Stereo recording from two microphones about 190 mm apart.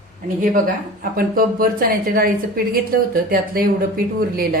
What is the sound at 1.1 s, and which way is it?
A woman's voice, 50° right (ahead or behind).